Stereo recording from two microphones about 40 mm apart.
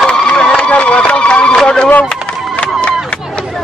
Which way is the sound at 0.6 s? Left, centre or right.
Left.